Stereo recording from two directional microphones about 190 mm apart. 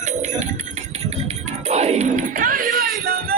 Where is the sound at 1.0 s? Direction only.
35° right (ahead or behind).